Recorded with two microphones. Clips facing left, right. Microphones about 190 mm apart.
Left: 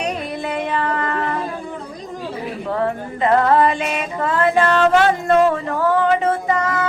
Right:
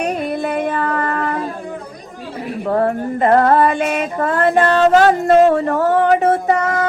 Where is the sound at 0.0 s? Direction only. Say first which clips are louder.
Right 4 dB; 50° right (ahead or behind).